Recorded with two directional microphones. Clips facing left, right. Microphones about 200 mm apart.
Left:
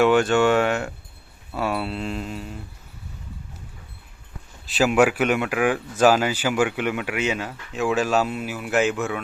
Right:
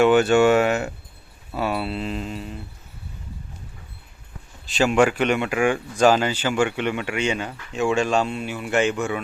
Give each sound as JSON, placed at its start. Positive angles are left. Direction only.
{"t": 0.0, "sound": "speech", "side_deg": -5}
{"t": 4.6, "sound": "speech", "side_deg": 5}